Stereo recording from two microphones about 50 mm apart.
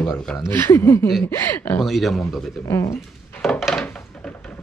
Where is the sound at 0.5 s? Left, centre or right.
Left.